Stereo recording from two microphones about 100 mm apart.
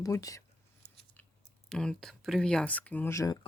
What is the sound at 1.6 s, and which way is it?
Speech, 5° left (ahead or behind).